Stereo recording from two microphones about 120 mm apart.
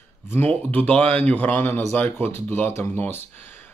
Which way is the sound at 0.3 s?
15° left (ahead or behind).